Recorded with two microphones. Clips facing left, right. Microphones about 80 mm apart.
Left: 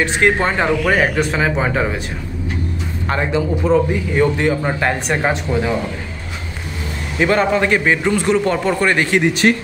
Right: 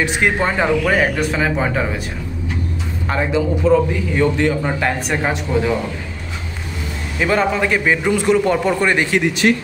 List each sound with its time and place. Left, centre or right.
0.0 s a man's voice: centre
0.7 s speech: centre
3.1 s speech: centre
3.6 s a man's voice: centre
7.2 s a man's voice: centre
9.2 s speech: left